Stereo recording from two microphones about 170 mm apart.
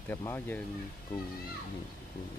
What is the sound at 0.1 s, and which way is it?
Speech, 10° left (ahead or behind).